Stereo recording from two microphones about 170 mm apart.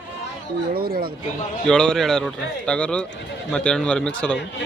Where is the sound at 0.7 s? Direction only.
60° right (ahead or behind).